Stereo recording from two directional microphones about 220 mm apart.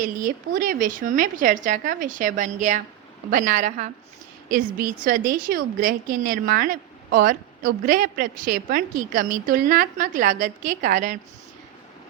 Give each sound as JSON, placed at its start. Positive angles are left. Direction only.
{"t": 0.0, "sound": "a woman's voice", "side_deg": -35}